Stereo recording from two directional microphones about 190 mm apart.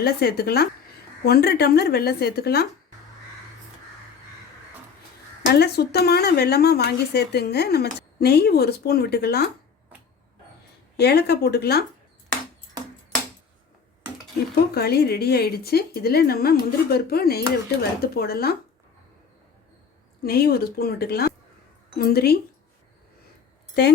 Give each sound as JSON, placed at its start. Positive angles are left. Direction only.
{"t": 0.0, "sound": "speech", "side_deg": 55}
{"t": 5.5, "sound": "speech", "side_deg": 60}
{"t": 10.9, "sound": "speech", "side_deg": 60}
{"t": 14.5, "sound": "a woman's voice", "side_deg": 55}
{"t": 20.2, "sound": "a woman's voice", "side_deg": 55}
{"t": 23.8, "sound": "speech", "side_deg": 60}